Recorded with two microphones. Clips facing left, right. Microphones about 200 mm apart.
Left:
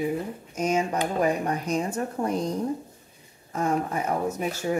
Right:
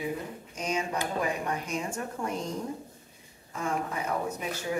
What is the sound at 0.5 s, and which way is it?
Speech, 45° left (ahead or behind).